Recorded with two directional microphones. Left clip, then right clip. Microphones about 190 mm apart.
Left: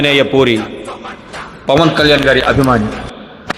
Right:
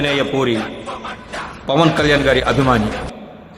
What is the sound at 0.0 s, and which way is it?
Speech, 20° left (ahead or behind).